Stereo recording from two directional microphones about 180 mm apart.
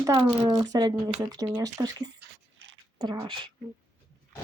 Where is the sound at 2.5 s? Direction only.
90° right.